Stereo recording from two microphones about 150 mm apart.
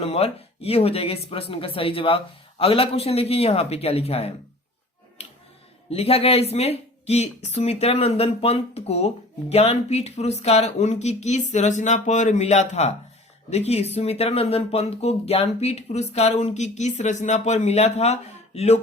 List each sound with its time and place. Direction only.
0.0 s speech: 40° left (ahead or behind)
5.2 s music: 45° left (ahead or behind)
5.9 s speech: 40° left (ahead or behind)